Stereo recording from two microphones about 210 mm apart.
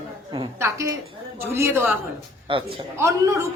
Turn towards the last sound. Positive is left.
turn(degrees=-15)  # may be behind; listen again after turning